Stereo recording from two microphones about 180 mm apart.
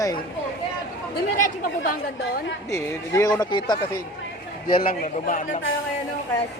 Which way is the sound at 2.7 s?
15° left (ahead or behind).